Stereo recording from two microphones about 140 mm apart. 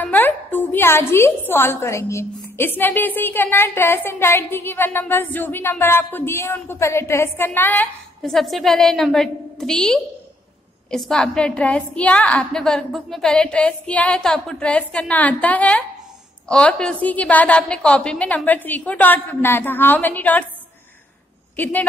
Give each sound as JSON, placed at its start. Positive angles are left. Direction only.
{"t": 0.0, "sound": "a woman's voice", "side_deg": 10}
{"t": 8.2, "sound": "a woman's voice", "side_deg": 0}